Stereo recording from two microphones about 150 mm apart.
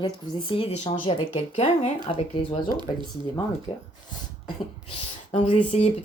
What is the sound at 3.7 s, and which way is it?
Speech, 35° left (ahead or behind).